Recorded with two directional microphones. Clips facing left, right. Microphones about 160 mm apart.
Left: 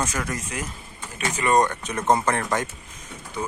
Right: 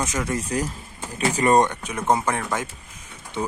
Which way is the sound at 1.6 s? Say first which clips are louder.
Even; 15° right (ahead or behind).